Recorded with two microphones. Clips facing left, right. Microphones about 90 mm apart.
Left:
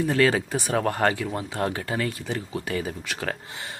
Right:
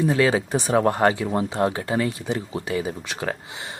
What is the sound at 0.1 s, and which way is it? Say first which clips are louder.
Speech: right 2 dB; 15° right (ahead or behind).